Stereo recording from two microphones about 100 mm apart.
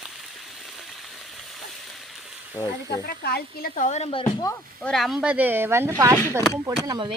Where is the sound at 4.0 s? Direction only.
65° left (ahead or behind).